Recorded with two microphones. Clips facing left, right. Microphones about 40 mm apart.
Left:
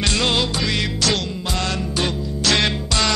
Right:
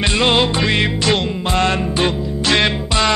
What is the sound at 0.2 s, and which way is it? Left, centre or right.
Music, right.